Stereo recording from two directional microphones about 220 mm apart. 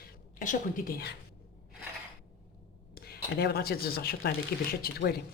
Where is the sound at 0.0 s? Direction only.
40° left (ahead or behind).